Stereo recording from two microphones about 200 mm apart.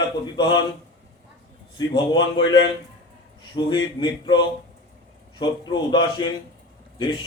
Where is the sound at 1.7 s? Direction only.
20° left (ahead or behind).